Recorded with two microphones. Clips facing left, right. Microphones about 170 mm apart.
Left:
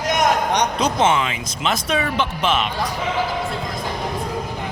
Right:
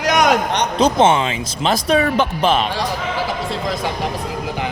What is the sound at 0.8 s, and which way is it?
Speech, 30° right (ahead or behind).